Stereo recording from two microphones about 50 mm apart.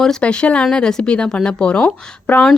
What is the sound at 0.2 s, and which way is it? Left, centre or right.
Speech, left.